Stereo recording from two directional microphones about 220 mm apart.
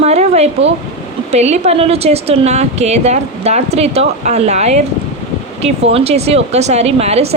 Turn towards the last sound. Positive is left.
turn(degrees=-30)  # may be behind; listen again after turning